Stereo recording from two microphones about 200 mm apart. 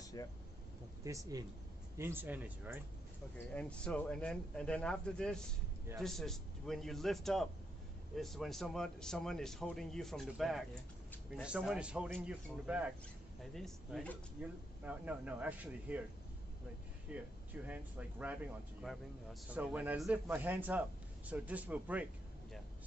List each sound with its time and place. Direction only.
0.0 s air conditioning: 20° left (ahead or behind)
1.0 s speech: 15° right (ahead or behind)
3.3 s speech: 5° left (ahead or behind)
17.1 s speech: 10° right (ahead or behind)